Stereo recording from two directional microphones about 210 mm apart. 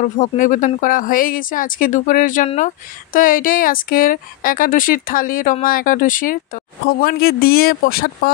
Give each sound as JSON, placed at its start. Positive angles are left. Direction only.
{"t": 0.2, "sound": "speech", "side_deg": 40}